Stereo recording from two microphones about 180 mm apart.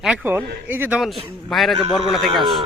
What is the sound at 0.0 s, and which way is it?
Speech, 10° right (ahead or behind).